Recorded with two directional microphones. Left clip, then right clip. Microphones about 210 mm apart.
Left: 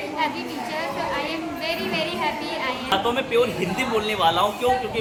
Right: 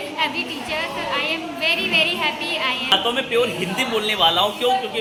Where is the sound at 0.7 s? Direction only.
15° left (ahead or behind).